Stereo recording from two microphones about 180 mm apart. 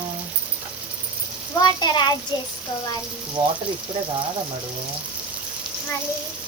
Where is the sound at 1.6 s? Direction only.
25° left (ahead or behind).